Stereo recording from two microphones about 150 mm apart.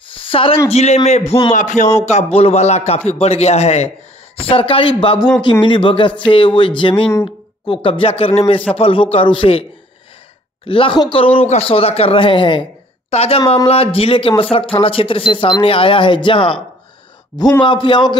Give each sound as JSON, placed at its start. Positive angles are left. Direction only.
{"t": 0.1, "sound": "a sound", "side_deg": 35}
{"t": 0.7, "sound": "speech", "side_deg": 45}
{"t": 10.7, "sound": "speech", "side_deg": 35}